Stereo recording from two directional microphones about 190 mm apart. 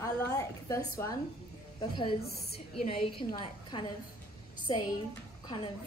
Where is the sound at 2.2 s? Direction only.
55° left (ahead or behind).